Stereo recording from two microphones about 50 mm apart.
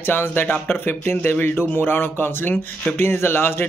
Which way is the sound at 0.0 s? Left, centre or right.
Left.